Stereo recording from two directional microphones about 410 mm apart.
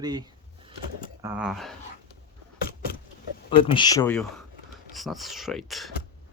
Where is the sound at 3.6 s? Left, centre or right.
Centre.